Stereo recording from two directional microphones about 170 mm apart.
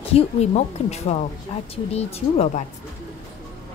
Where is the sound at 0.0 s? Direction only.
40° left (ahead or behind).